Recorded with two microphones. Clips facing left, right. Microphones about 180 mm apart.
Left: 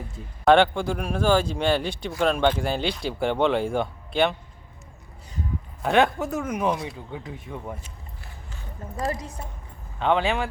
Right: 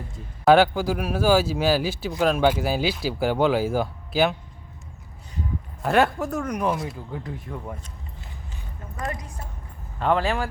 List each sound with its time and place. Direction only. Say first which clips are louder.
0.4 s speech: right 1 dB; 5° right (ahead or behind)
5.8 s speech: even; centre (ahead or behind)
9.0 s a woman's voice: left 3 dB; 25° left (ahead or behind)
10.0 s speech: even; centre (ahead or behind)